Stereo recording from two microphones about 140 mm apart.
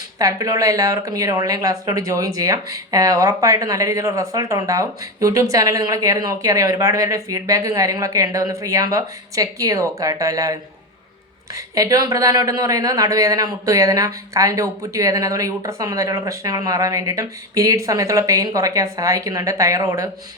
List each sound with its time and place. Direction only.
0.2 s a woman's voice: 25° right (ahead or behind)